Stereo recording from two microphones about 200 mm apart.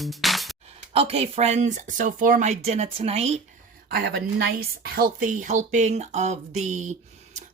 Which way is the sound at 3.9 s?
55° right (ahead or behind).